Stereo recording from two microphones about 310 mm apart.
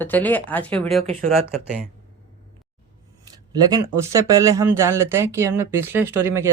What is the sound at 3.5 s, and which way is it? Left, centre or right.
Speech, centre.